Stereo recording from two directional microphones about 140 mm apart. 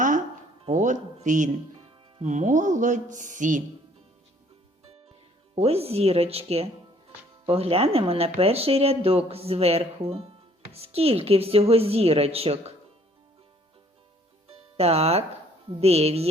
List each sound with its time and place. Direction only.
0.6 s speech: 55° right (ahead or behind)
5.5 s speech: 45° right (ahead or behind)
14.5 s music: 45° right (ahead or behind)
15.7 s speech: 45° right (ahead or behind)